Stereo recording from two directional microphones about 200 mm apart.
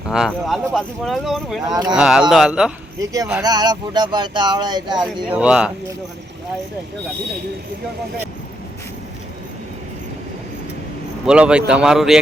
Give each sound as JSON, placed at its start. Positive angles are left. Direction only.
{"t": 0.1, "sound": "speech", "side_deg": 0}
{"t": 1.7, "sound": "speech", "side_deg": -20}
{"t": 2.0, "sound": "speech", "side_deg": -5}
{"t": 3.0, "sound": "speech", "side_deg": -15}
{"t": 4.9, "sound": "speech", "side_deg": -5}
{"t": 11.3, "sound": "speech", "side_deg": -5}